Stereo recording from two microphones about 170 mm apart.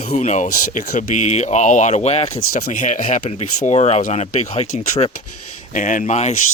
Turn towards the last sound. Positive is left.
turn(degrees=45)  # may be behind; listen again after turning